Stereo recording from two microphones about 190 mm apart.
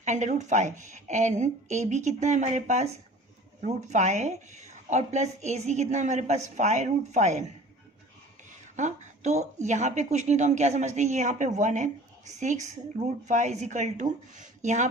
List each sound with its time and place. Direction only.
0.0 s speech: 40° right (ahead or behind)
8.7 s speech: 40° right (ahead or behind)